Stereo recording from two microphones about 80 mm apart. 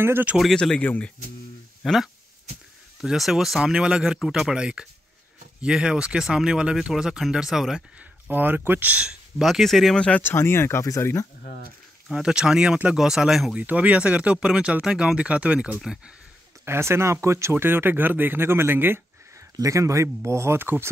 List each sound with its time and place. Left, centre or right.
0.0 s speech: right
0.6 s speech: centre
1.8 s speech: centre
8.0 s speech: right
9.5 s speech: centre
10.2 s speech: left
12.1 s speech: centre
13.6 s speech: centre
16.6 s speech: right
19.6 s speech: right